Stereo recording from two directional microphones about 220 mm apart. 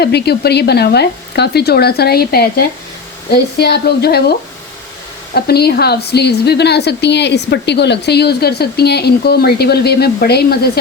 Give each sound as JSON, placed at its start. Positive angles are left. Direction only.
{"t": 0.0, "sound": "a woman's voice", "side_deg": 50}